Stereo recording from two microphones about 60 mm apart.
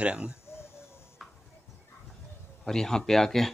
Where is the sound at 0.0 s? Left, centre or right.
Centre.